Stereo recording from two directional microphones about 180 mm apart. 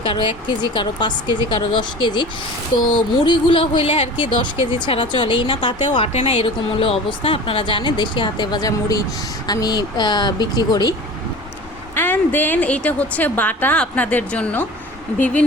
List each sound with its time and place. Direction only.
0.0 s a woman's voice: 30° left (ahead or behind)
11.9 s a woman's voice: 10° left (ahead or behind)